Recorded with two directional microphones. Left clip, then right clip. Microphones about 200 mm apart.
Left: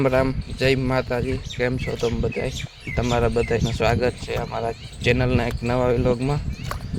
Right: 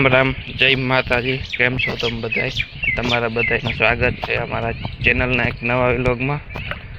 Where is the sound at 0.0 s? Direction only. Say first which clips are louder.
Right 5 dB; centre (ahead or behind).